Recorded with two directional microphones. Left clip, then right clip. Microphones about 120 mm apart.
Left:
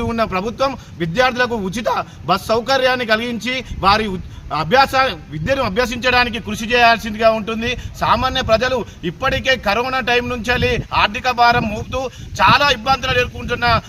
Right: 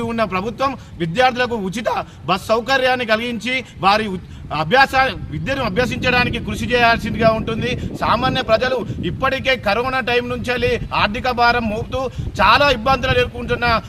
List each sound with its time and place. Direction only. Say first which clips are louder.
0.0 s a man's voice: left 1 dB; 20° right (ahead or behind)